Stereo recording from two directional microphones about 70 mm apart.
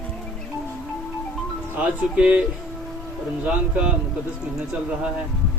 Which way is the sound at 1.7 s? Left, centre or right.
Right.